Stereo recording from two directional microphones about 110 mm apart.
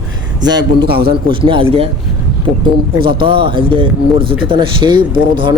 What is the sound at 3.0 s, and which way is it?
Speech, 50° right (ahead or behind).